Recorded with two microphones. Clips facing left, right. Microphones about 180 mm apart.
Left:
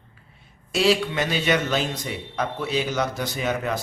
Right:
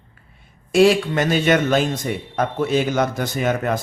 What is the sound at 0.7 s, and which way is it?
A man's voice, 50° right (ahead or behind).